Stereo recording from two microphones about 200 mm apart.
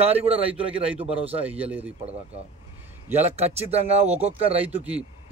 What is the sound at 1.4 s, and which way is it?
Speech, 10° right (ahead or behind).